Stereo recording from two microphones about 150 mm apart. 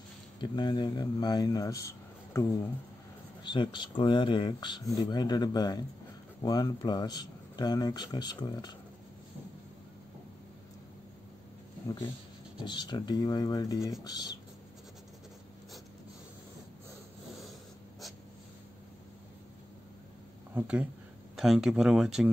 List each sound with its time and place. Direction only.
0.4 s a man's voice: 30° left (ahead or behind)
3.4 s speech: 30° left (ahead or behind)
12.6 s speech: 30° left (ahead or behind)
20.5 s speech: 10° right (ahead or behind)